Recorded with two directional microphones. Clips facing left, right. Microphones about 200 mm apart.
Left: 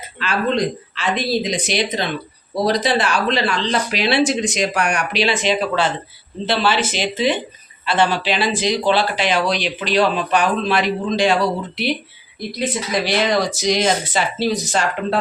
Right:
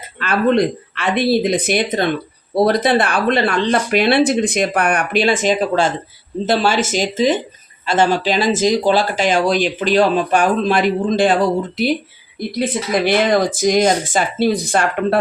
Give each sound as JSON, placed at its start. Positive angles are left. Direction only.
{"t": 0.2, "sound": "speech", "side_deg": -55}